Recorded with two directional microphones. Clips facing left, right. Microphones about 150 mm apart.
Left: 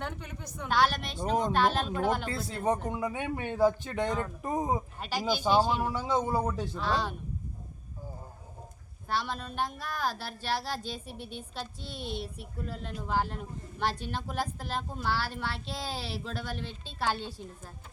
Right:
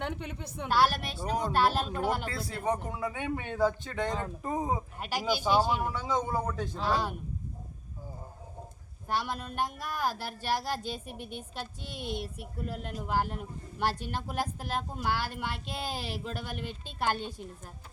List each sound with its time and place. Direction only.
0.0 s a woman's voice: 25° right (ahead or behind)
0.7 s speech: 5° right (ahead or behind)
2.3 s a man's voice: 20° left (ahead or behind)
4.9 s speech: 10° right (ahead or behind)
5.9 s a man's voice: 10° left (ahead or behind)
6.8 s speech: 10° right (ahead or behind)
9.0 s speech: 10° right (ahead or behind)